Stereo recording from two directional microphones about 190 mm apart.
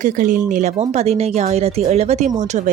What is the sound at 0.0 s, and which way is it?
Speech, 45° right (ahead or behind).